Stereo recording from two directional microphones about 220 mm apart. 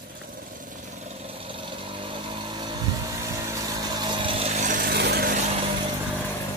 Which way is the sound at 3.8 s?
20° right (ahead or behind).